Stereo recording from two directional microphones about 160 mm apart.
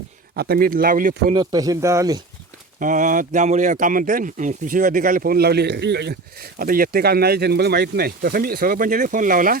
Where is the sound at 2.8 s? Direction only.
55° right (ahead or behind).